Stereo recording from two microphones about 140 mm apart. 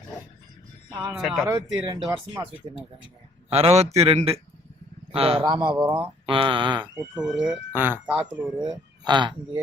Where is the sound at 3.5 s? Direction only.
45° right (ahead or behind).